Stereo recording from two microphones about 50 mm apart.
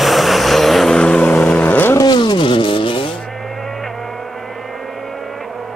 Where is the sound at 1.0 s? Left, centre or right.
Centre.